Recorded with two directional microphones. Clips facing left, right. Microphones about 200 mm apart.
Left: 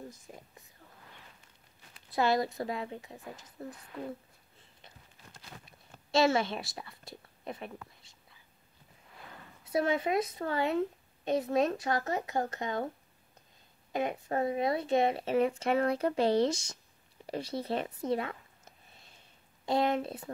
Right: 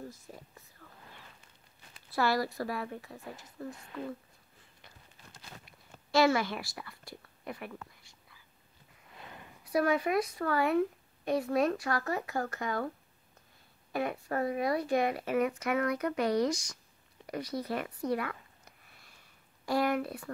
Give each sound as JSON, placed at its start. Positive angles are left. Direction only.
{"t": 0.8, "sound": "whispering", "side_deg": 25}
{"t": 2.1, "sound": "speech", "side_deg": 20}
{"t": 4.8, "sound": "clip-clop", "side_deg": 20}
{"t": 5.7, "sound": "a sound", "side_deg": 25}
{"t": 9.7, "sound": "speech", "side_deg": 25}
{"t": 13.9, "sound": "speech", "side_deg": 20}
{"t": 18.9, "sound": "a sound", "side_deg": 25}